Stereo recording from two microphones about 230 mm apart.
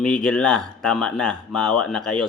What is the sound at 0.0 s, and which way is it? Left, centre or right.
Speech, centre.